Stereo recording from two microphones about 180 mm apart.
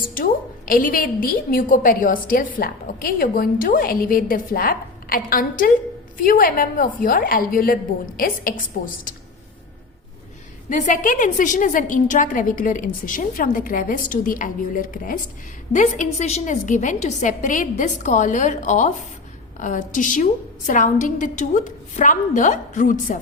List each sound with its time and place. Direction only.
0.7 s a woman's voice: 50° left (ahead or behind)
10.7 s a woman's voice: 45° left (ahead or behind)